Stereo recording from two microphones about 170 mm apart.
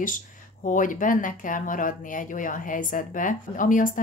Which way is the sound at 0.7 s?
50° left (ahead or behind).